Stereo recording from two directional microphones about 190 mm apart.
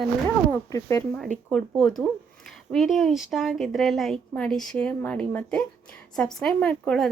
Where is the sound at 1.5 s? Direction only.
5° left (ahead or behind).